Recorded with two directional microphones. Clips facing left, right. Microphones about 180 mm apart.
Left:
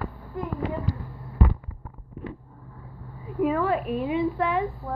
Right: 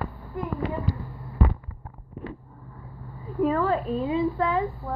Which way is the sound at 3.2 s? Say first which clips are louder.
Even; 10° left (ahead or behind).